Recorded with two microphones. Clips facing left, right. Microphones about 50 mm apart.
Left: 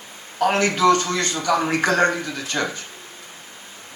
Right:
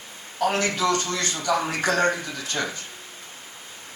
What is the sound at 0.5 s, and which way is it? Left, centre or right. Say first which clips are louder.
A man's voice: left 8 dB; left.